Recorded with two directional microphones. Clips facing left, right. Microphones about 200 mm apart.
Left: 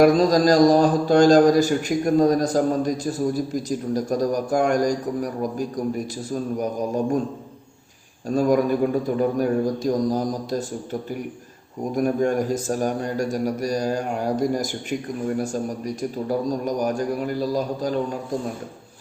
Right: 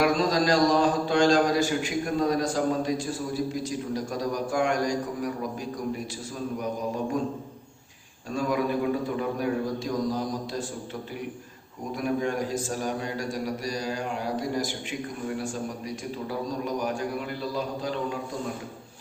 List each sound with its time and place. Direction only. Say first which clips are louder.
0.0 s a man's voice: left 8 dB; 40° left (ahead or behind)
8.3 s a man's voice: left 7 dB; 45° left (ahead or behind)
11.9 s a man's voice: left 6 dB; 45° left (ahead or behind)